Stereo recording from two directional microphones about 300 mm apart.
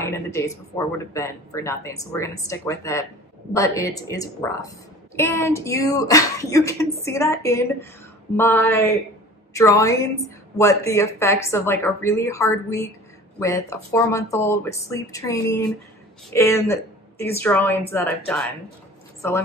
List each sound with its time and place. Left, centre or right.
0.0 s a woman's voice: centre